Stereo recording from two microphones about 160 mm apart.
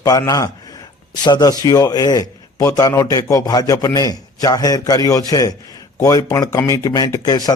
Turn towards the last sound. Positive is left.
turn(degrees=25)  # may be behind; listen again after turning